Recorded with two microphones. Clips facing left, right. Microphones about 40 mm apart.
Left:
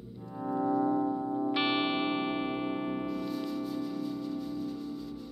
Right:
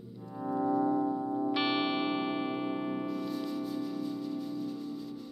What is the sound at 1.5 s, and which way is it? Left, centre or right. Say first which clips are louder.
Music: left 1 dB; left.